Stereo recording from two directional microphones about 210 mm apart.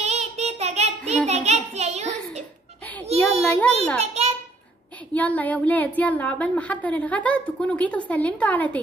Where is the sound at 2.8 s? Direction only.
5° left (ahead or behind).